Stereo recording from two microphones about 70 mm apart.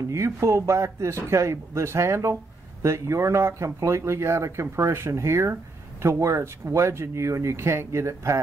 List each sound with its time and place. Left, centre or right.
0.1 s speech: right